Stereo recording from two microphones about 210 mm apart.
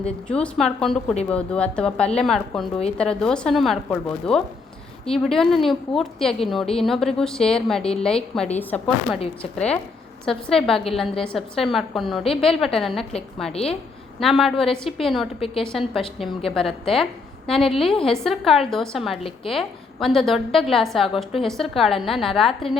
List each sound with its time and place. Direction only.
0.0 s a woman's voice: 5° left (ahead or behind)
13.5 s a woman's voice: 30° left (ahead or behind)
14.2 s a woman's voice: centre (ahead or behind)